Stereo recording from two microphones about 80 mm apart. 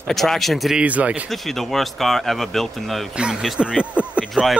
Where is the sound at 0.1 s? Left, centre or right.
Centre.